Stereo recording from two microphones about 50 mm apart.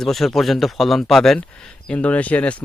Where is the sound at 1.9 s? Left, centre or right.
Left.